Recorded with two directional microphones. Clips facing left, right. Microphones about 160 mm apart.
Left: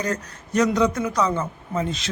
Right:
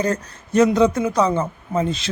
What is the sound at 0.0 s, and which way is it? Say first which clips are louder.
A man's voice: right 5 dB; 30° right (ahead or behind).